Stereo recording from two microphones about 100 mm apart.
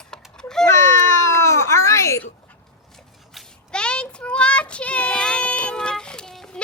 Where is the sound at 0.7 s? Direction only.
25° left (ahead or behind).